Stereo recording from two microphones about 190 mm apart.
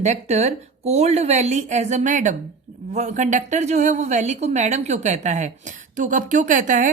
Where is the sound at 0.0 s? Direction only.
35° right (ahead or behind).